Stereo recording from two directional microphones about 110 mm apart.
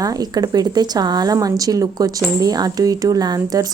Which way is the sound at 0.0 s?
35° right (ahead or behind).